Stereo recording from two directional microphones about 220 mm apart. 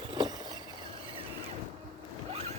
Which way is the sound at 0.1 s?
20° right (ahead or behind).